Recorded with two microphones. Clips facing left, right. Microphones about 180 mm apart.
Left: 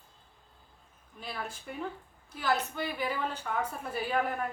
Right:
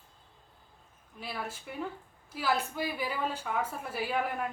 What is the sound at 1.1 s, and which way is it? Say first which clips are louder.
A woman's voice: right 1 dB; 5° right (ahead or behind).